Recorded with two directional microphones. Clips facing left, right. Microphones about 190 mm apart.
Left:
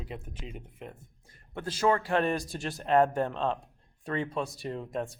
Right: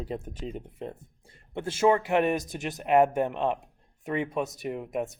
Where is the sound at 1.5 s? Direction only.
25° right (ahead or behind).